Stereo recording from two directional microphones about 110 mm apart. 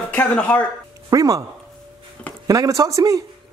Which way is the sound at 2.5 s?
30° right (ahead or behind).